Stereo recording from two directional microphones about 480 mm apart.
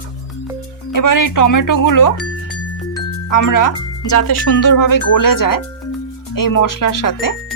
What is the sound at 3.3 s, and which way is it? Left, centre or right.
Speech, left.